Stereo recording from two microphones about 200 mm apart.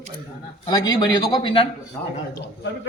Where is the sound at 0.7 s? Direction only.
20° left (ahead or behind).